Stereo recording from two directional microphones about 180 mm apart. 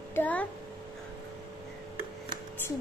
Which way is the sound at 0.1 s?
10° left (ahead or behind).